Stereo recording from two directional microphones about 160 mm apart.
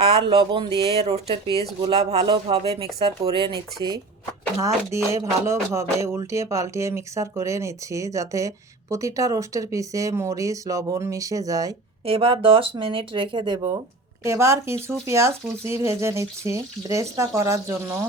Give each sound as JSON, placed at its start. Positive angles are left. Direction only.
{"t": 0.2, "sound": "speech", "side_deg": -30}
{"t": 4.6, "sound": "music", "side_deg": -20}
{"t": 12.0, "sound": "speech", "side_deg": -35}
{"t": 14.3, "sound": "speech", "side_deg": -15}